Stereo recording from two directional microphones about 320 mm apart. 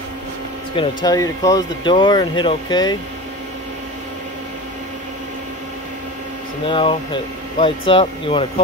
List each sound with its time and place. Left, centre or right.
0.7 s speech: centre
6.6 s speech: centre